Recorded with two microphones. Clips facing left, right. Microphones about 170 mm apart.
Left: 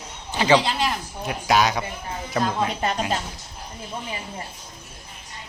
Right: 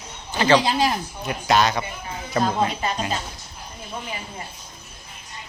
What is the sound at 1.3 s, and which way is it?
Speech, 10° left (ahead or behind).